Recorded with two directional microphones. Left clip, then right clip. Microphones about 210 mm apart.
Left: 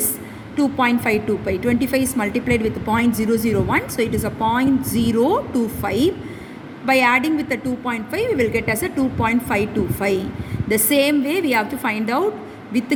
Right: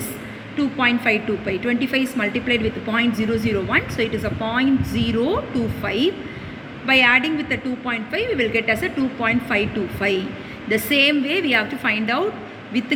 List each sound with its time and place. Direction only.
0.5 s a woman's voice: 50° left (ahead or behind)
4.2 s a woman's voice: 15° left (ahead or behind)
4.9 s a woman's voice: 50° left (ahead or behind)